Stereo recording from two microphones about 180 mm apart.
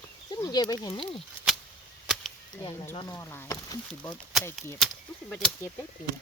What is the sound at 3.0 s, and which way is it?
Speech, 15° left (ahead or behind).